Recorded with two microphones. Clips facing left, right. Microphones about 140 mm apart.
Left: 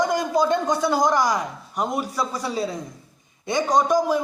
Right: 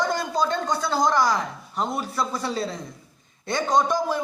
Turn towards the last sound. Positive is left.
turn(degrees=10)  # may be behind; listen again after turning